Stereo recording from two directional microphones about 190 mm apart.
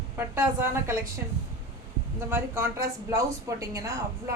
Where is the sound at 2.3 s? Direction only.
15° right (ahead or behind).